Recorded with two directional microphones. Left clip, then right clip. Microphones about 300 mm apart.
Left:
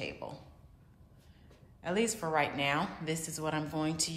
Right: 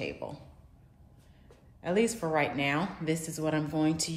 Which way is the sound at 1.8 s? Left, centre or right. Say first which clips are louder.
Right 4 dB; centre.